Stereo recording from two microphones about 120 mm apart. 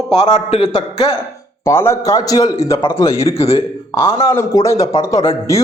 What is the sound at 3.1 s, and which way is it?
Speech, 55° left (ahead or behind).